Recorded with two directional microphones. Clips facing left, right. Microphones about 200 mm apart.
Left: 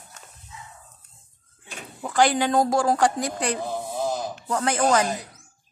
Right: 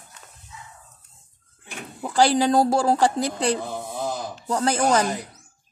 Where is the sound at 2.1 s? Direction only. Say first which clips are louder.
Right 2 dB; 35° right (ahead or behind).